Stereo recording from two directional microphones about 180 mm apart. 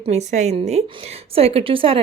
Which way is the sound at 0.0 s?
40° right (ahead or behind).